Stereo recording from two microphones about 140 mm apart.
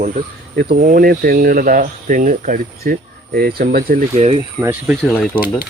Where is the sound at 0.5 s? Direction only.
90° right.